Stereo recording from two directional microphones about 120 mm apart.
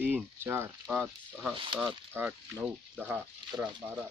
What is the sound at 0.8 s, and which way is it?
Speech, 10° right (ahead or behind).